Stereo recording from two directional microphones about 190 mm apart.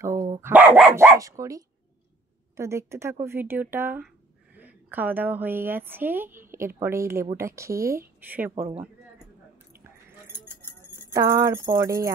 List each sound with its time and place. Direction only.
0.0 s a woman's voice: 15° right (ahead or behind)
10.4 s clip-clop: 10° left (ahead or behind)
11.1 s a woman's voice: 15° right (ahead or behind)